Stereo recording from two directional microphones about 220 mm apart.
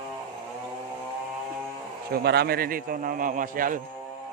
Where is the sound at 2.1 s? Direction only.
45° right (ahead or behind).